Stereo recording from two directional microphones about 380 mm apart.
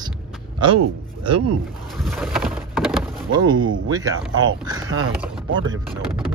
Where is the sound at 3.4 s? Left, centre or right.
Centre.